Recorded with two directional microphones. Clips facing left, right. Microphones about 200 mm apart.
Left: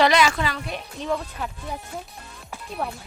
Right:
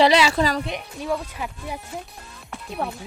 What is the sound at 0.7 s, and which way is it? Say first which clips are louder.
Speech: right 1 dB; 10° right (ahead or behind).